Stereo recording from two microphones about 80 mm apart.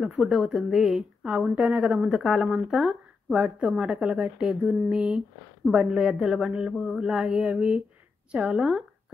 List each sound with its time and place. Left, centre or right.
0.0 s a woman's voice: centre
2.0 s speech: centre
2.4 s a woman's voice: centre